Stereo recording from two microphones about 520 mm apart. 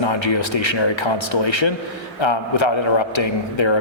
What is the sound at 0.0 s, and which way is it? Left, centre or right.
A man's voice, left.